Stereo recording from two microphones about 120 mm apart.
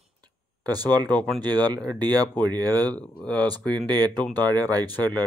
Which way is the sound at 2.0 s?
35° right (ahead or behind).